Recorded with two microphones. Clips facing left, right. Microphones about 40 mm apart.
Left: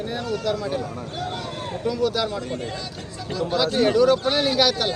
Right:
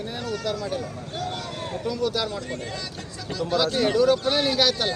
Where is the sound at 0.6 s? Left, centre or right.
Centre.